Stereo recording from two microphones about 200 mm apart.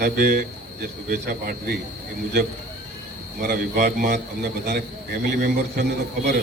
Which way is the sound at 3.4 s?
50° right (ahead or behind).